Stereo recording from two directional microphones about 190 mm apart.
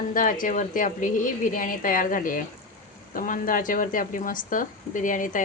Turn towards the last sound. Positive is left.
turn(degrees=45)  # may be behind; listen again after turning